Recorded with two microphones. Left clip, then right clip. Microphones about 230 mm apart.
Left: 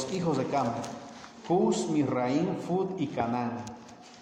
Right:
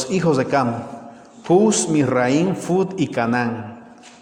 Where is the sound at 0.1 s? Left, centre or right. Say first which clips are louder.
Right 12 dB; right.